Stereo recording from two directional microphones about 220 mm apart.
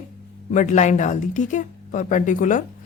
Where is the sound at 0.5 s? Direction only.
35° left (ahead or behind).